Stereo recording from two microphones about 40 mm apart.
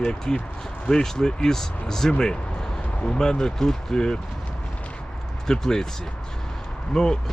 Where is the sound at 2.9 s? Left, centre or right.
Left.